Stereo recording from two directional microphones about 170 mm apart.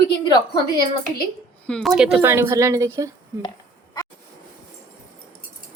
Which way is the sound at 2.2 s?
15° right (ahead or behind).